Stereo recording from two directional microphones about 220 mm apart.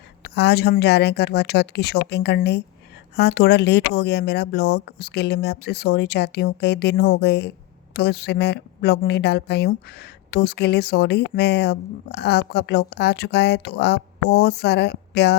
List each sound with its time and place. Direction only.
0.2 s a woman's voice: 50° left (ahead or behind)